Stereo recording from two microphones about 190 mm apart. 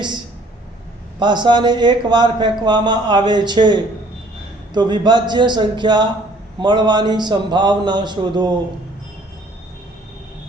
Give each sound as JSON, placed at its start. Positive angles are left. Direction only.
{"t": 1.2, "sound": "a man's voice", "side_deg": -25}